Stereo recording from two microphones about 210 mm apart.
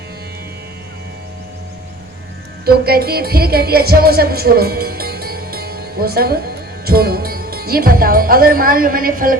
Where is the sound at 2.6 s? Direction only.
45° right (ahead or behind).